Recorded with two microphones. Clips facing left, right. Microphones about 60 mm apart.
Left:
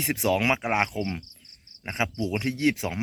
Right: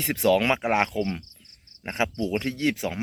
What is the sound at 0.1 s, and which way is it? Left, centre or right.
Speech, centre.